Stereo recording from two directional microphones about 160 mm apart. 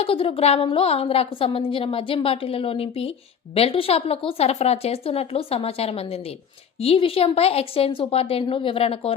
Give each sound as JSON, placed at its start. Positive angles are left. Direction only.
{"t": 0.0, "sound": "a woman's voice", "side_deg": 35}